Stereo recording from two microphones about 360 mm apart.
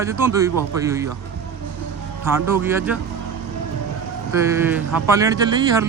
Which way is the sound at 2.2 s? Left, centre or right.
Centre.